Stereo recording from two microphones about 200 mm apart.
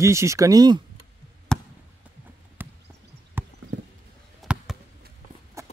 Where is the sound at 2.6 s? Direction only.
10° right (ahead or behind).